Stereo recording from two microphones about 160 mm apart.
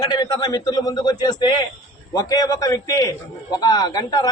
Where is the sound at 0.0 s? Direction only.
25° left (ahead or behind).